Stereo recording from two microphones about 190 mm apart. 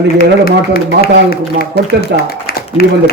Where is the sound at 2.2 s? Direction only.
55° left (ahead or behind).